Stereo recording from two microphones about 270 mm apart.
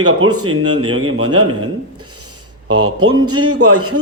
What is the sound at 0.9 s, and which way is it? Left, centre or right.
Speech, right.